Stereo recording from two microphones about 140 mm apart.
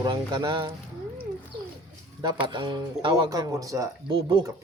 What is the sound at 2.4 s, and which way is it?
Speech, 35° right (ahead or behind).